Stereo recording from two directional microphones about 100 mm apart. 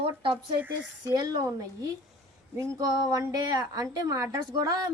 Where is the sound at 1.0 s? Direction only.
45° right (ahead or behind).